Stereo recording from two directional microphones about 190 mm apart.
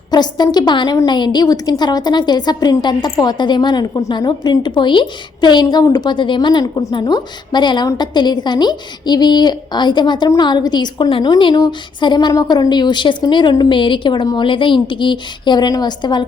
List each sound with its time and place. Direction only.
0.1 s a woman's voice: 20° left (ahead or behind)